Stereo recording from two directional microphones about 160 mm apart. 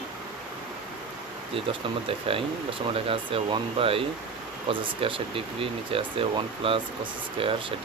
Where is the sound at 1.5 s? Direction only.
35° right (ahead or behind).